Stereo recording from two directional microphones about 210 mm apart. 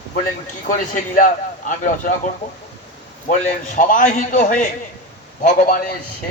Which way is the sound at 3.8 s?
40° left (ahead or behind).